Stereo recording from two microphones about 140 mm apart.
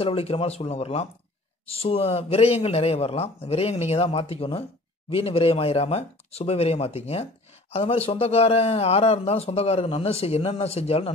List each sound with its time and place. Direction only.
0.0 s speech: 45° left (ahead or behind)